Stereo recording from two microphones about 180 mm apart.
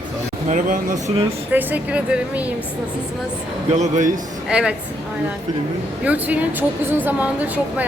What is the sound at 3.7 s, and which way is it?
Speech, 40° right (ahead or behind).